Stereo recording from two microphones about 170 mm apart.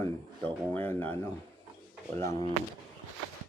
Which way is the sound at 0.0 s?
10° left (ahead or behind).